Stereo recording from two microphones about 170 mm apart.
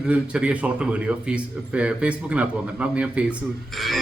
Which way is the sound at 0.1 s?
5° right (ahead or behind).